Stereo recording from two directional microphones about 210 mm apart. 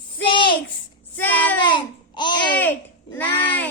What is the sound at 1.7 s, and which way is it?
Babbling, 20° left (ahead or behind).